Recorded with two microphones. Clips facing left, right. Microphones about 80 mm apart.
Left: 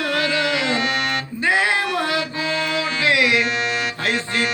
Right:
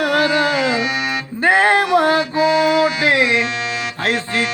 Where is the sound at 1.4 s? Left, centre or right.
Right.